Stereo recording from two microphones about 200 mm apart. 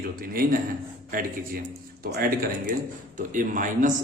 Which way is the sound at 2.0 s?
55° right (ahead or behind).